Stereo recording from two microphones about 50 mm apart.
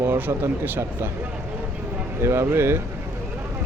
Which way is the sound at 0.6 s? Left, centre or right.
Right.